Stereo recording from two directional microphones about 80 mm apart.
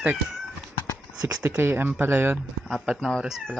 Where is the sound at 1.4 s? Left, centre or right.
Right.